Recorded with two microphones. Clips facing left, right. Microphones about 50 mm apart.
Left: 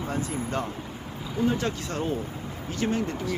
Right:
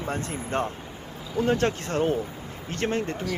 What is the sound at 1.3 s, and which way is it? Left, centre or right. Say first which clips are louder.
Speech: right 3 dB; right.